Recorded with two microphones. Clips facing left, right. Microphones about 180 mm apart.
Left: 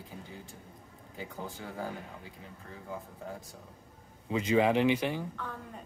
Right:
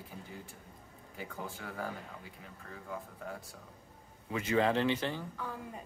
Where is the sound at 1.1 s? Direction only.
20° left (ahead or behind).